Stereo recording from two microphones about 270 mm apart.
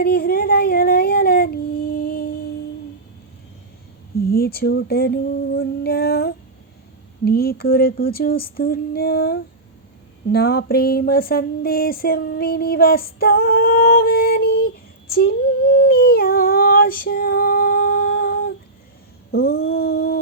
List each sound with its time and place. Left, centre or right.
0.0 s child singing: left
4.3 s female singing: left
10.3 s a sound: left